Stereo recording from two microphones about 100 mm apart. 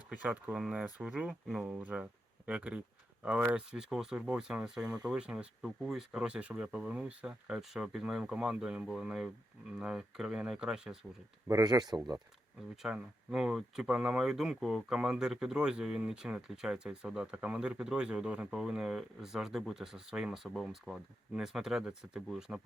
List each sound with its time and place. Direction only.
0.1 s speech: 15° right (ahead or behind)
11.4 s speech: 35° right (ahead or behind)
12.7 s speech: 5° right (ahead or behind)